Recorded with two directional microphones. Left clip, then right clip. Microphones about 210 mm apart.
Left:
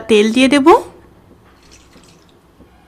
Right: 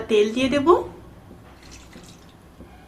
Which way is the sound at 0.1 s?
55° left (ahead or behind).